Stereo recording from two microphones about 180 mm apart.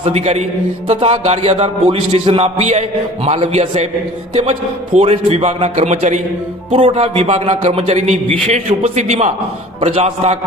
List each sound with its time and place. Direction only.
0.0 s a man's voice: 35° right (ahead or behind)
4.9 s a man's voice: 35° right (ahead or behind)